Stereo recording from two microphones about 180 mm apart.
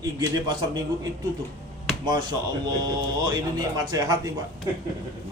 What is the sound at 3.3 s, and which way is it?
A man's voice, 20° right (ahead or behind).